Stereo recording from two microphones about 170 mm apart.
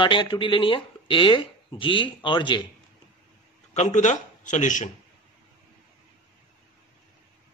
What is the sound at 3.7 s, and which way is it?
Speech, 45° left (ahead or behind).